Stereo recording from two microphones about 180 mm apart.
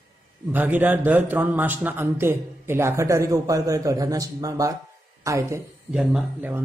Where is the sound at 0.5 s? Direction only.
10° right (ahead or behind).